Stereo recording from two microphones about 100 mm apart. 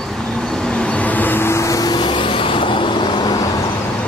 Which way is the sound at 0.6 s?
10° left (ahead or behind).